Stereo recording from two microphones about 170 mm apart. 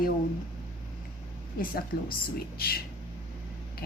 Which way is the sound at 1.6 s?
60° left (ahead or behind).